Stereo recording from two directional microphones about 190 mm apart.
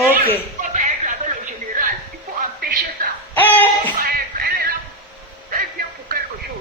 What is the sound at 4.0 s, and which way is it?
Music, 50° right (ahead or behind).